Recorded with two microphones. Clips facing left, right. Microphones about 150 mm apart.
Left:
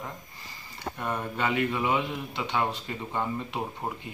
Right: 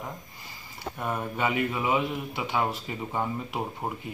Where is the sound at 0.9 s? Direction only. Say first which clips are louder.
Right 1 dB; 5° right (ahead or behind).